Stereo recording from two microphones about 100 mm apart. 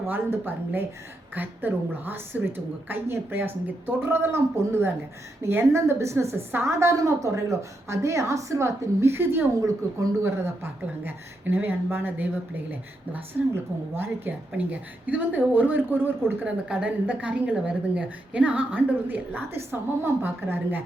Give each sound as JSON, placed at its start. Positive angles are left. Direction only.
{"t": 0.1, "sound": "a woman's voice", "side_deg": -20}
{"t": 9.6, "sound": "a woman's voice", "side_deg": -30}